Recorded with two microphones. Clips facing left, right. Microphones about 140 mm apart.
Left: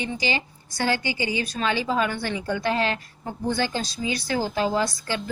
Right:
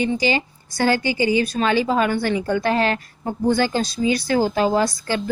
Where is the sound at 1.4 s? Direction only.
45° right (ahead or behind).